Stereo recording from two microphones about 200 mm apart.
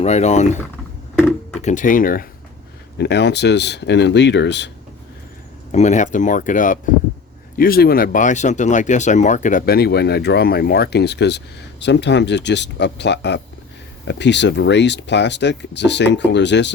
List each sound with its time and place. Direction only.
0.0 s speech: 35° left (ahead or behind)
1.6 s speech: 40° left (ahead or behind)
3.0 s speech: 60° left (ahead or behind)
5.7 s speech: 35° left (ahead or behind); by 16.7 s 60° left (ahead or behind)